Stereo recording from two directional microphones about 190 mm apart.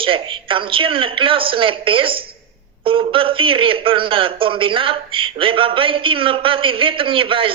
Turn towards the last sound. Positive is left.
turn(degrees=-30)  # may be behind; listen again after turning